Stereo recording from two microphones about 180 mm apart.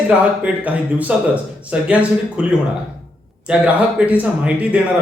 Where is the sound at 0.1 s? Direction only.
10° right (ahead or behind).